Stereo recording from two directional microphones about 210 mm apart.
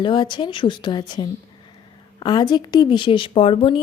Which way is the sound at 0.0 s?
20° left (ahead or behind).